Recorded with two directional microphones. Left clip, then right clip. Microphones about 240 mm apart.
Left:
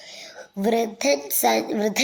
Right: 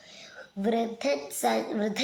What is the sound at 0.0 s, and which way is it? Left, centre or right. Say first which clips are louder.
A woman's voice: left 7 dB; left.